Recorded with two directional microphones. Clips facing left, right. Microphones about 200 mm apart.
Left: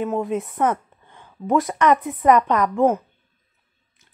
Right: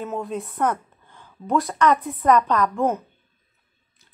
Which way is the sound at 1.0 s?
20° left (ahead or behind).